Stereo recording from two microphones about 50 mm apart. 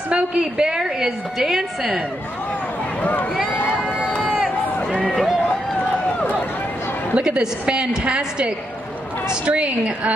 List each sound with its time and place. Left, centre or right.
0.1 s a woman's voice: centre
3.0 s speech: left
7.2 s a woman's voice: centre